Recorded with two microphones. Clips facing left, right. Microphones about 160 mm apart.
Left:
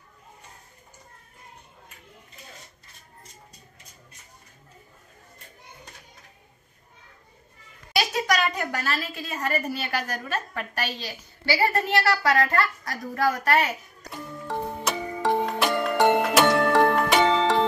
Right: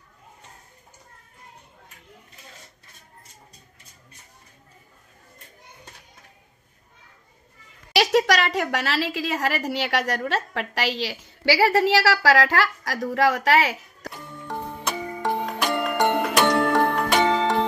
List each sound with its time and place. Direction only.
7.9 s a woman's voice: 80° right
14.5 s music: centre (ahead or behind)